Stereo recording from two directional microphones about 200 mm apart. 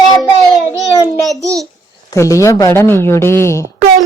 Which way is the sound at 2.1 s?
15° left (ahead or behind).